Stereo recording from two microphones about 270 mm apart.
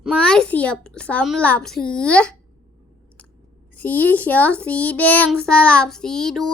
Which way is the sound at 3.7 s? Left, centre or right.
Centre.